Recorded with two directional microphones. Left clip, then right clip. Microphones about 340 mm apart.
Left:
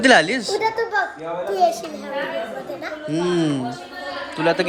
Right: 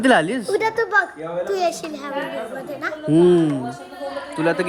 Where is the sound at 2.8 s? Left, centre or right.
Centre.